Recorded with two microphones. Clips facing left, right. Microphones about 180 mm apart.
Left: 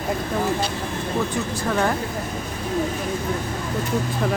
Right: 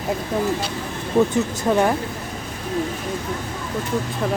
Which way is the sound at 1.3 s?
20° right (ahead or behind).